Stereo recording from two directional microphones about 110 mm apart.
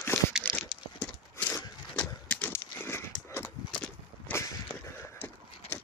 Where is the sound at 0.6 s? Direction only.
5° right (ahead or behind).